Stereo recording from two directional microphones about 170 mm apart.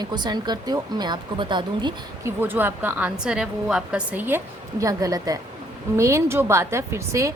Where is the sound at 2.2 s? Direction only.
10° right (ahead or behind).